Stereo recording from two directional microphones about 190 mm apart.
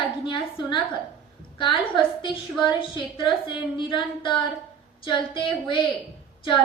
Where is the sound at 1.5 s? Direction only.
25° left (ahead or behind).